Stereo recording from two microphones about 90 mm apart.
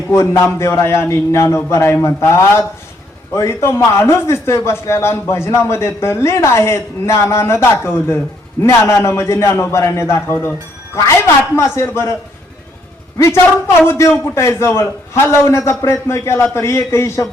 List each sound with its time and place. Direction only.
0.1 s a man's voice: 30° left (ahead or behind)
11.5 s a man's voice: 30° left (ahead or behind)
13.1 s a man's voice: 30° left (ahead or behind)